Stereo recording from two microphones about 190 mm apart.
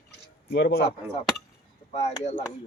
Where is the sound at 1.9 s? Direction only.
35° left (ahead or behind).